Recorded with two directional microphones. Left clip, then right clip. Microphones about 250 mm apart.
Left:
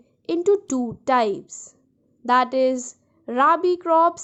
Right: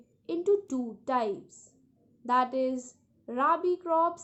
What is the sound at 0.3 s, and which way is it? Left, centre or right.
A woman's voice, left.